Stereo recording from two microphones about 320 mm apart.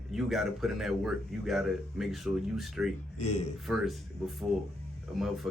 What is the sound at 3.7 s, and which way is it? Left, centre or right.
Speech, centre.